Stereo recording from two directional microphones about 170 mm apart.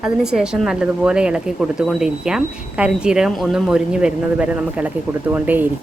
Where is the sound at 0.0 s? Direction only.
5° right (ahead or behind).